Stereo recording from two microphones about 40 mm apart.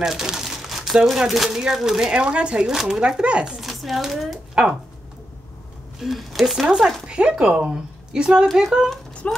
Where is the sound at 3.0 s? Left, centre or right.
Right.